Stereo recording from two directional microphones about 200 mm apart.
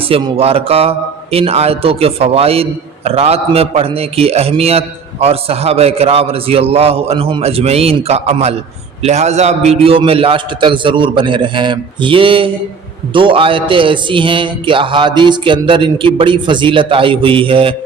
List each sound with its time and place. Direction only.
0.1 s a man's voice: 30° right (ahead or behind)